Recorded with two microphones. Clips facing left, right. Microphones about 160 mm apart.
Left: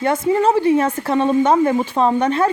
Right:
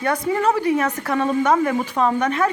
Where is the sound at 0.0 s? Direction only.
25° left (ahead or behind).